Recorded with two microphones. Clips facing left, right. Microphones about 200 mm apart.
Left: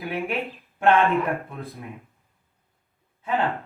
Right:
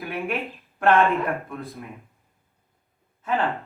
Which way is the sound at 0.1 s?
15° left (ahead or behind).